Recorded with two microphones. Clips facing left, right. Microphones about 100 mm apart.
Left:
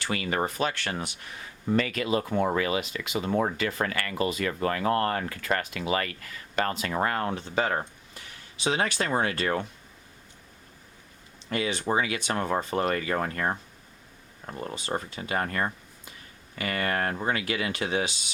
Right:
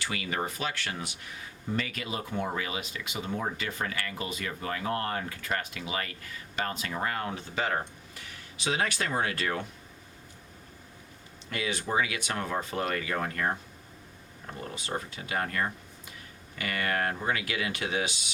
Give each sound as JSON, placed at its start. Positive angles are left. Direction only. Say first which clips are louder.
{"t": 0.0, "sound": "speech", "louder": "left 4 dB", "side_deg": 45}
{"t": 1.7, "sound": "speech", "louder": "left 8 dB", "side_deg": 65}
{"t": 11.4, "sound": "speech", "louder": "left 5 dB", "side_deg": 35}
{"t": 14.6, "sound": "speech", "louder": "left 4 dB", "side_deg": 35}